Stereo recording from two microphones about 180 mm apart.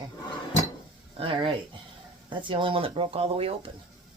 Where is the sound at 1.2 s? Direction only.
30° right (ahead or behind).